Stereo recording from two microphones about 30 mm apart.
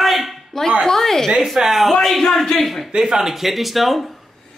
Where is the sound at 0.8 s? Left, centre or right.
Centre.